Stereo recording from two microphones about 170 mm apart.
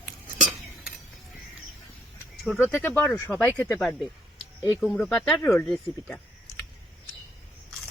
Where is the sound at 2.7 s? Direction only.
10° left (ahead or behind).